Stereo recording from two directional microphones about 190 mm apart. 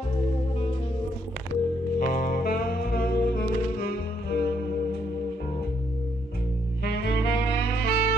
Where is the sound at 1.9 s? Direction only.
45° left (ahead or behind).